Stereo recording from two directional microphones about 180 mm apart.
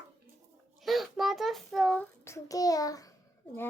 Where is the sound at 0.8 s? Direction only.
Centre (ahead or behind); by 3.1 s 20° left (ahead or behind).